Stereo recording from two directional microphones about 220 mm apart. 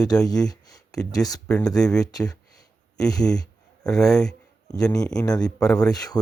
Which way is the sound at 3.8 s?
Centre (ahead or behind).